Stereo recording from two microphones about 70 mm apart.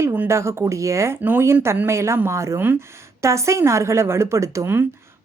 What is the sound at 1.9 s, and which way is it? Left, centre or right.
Speech, right.